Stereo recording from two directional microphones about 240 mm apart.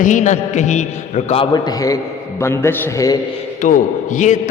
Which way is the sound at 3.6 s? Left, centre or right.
Left.